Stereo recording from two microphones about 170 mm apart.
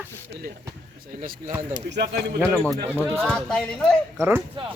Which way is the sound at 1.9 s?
70° right (ahead or behind).